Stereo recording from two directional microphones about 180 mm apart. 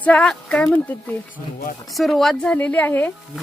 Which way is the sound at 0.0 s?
5° left (ahead or behind).